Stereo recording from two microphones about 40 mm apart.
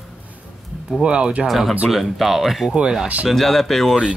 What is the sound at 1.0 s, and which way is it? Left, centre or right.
Speech, right.